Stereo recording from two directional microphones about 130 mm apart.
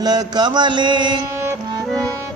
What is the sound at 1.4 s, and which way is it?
Music, 25° right (ahead or behind).